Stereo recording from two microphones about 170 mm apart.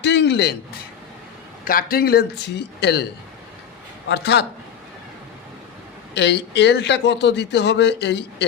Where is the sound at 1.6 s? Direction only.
55° left (ahead or behind); by 3.0 s 75° left (ahead or behind).